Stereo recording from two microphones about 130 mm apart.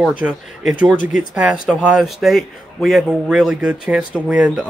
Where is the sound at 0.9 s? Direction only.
90° left.